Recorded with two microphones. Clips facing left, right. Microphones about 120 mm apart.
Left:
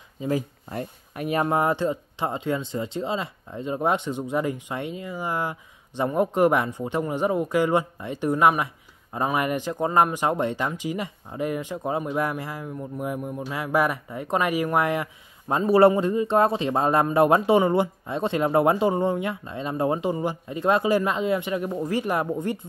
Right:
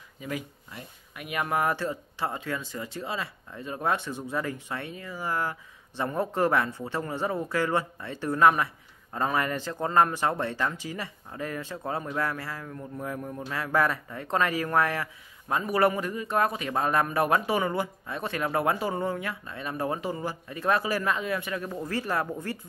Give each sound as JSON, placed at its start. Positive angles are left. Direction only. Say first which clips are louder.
{"t": 0.2, "sound": "speech", "louder": "left 9 dB", "side_deg": 30}
{"t": 0.7, "sound": "speech", "louder": "left 12 dB", "side_deg": 45}